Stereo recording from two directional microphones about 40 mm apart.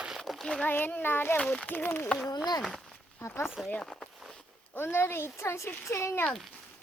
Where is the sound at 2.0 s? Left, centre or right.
Centre.